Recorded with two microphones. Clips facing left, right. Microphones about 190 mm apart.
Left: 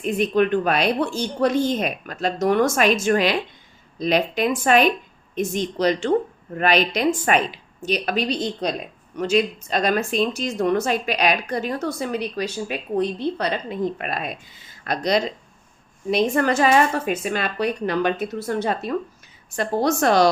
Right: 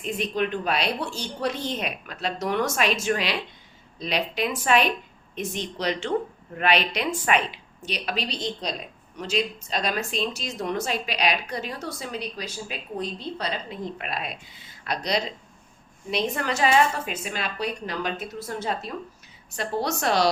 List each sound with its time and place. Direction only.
0.0 s speech: 55° left (ahead or behind)
19.5 s speech: 50° left (ahead or behind)